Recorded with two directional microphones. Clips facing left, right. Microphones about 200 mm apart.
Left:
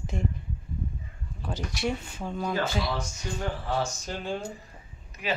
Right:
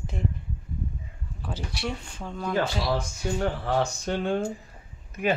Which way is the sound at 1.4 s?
5° right (ahead or behind).